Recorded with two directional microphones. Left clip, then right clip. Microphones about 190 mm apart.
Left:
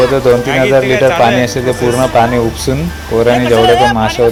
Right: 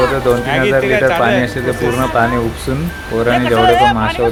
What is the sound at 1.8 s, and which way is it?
Speech, 5° right (ahead or behind).